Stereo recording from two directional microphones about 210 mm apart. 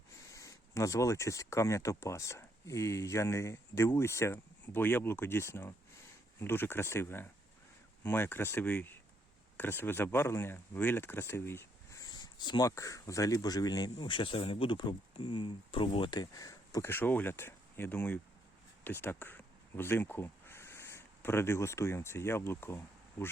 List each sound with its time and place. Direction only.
0.3 s speech: 15° left (ahead or behind)